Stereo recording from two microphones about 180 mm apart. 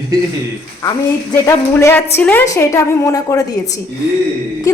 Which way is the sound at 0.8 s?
20° left (ahead or behind).